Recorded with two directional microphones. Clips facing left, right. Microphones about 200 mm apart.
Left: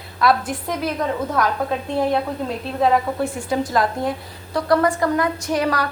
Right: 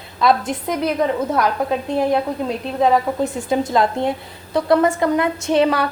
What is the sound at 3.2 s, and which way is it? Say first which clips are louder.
A woman's voice: right 2 dB; 20° right (ahead or behind).